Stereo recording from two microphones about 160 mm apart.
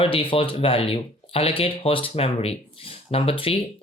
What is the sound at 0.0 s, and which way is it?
Speech, 35° left (ahead or behind).